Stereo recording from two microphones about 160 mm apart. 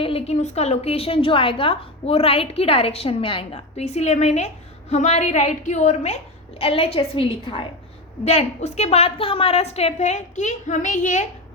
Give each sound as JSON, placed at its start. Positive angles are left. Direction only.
{"t": 0.0, "sound": "a woman's voice", "side_deg": 40}